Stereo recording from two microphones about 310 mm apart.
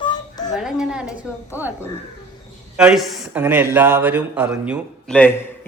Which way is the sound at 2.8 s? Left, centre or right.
Centre.